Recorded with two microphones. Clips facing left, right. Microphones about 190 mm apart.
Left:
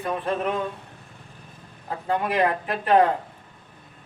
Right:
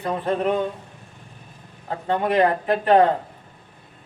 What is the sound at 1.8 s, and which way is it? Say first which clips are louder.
Speech: right 3 dB; 30° right (ahead or behind).